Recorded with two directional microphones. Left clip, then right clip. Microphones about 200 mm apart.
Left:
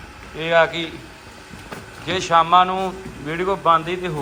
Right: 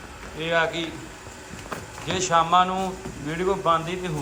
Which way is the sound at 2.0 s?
15° right (ahead or behind).